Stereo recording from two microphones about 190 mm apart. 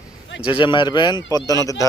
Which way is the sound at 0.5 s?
25° left (ahead or behind).